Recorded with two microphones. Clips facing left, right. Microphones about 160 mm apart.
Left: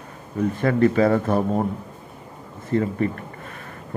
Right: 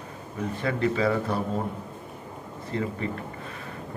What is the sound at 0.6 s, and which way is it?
Speech, 50° left (ahead or behind).